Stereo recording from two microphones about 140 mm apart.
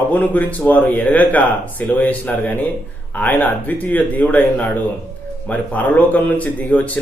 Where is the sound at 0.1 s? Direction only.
10° left (ahead or behind).